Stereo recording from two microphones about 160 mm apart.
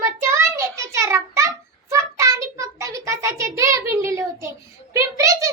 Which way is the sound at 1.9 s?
20° right (ahead or behind).